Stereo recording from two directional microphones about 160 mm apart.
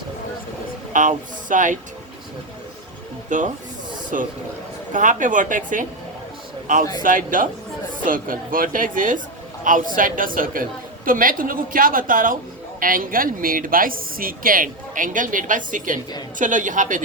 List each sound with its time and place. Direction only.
0.9 s speech: 55° right (ahead or behind)
3.2 s speech: 50° right (ahead or behind)
7.0 s speech: 55° right (ahead or behind)